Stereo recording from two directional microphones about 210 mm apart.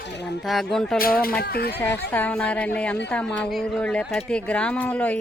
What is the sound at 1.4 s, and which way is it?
Speech, 45° left (ahead or behind).